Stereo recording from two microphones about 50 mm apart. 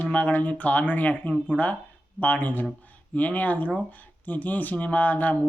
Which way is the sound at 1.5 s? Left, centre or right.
Centre.